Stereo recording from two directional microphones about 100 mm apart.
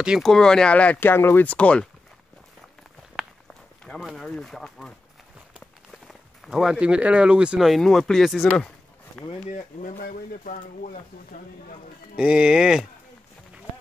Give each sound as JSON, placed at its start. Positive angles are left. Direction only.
{"t": 0.2, "sound": "speech", "side_deg": 5}
{"t": 3.1, "sound": "walk", "side_deg": 0}
{"t": 4.2, "sound": "speech", "side_deg": 5}
{"t": 5.9, "sound": "speech", "side_deg": 0}
{"t": 12.2, "sound": "speech", "side_deg": -10}